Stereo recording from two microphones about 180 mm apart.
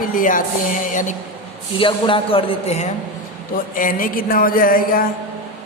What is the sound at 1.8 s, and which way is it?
Speech, 30° left (ahead or behind).